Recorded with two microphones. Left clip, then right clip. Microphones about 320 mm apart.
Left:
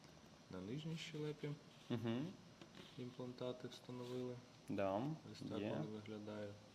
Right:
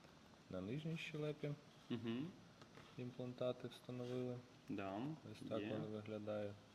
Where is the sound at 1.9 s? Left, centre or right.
Left.